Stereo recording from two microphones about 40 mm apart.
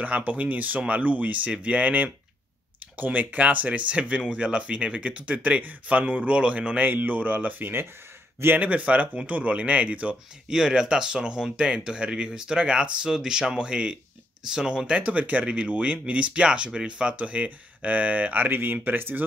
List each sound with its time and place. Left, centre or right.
0.0 s speech: right
6.8 s speech: right
8.5 s speech: right
10.5 s speech: centre
14.9 s speech: right
15.4 s speech: right
15.7 s speech: right
18.5 s speech: right